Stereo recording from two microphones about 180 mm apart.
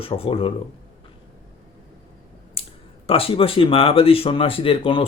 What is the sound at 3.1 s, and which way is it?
Speech, 30° left (ahead or behind).